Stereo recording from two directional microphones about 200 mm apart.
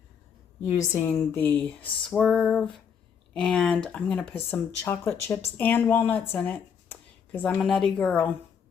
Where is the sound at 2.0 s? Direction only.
Centre (ahead or behind).